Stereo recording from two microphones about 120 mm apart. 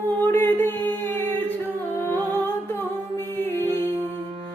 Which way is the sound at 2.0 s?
20° left (ahead or behind).